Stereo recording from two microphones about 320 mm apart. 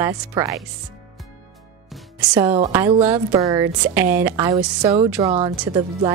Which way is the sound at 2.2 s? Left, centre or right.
Centre.